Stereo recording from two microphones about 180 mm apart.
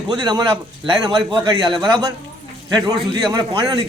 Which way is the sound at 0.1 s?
25° right (ahead or behind).